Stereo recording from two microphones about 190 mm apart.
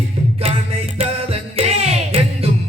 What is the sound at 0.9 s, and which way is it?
Music, 30° right (ahead or behind).